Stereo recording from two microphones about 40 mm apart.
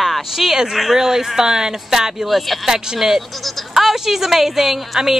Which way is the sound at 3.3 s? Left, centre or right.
Centre.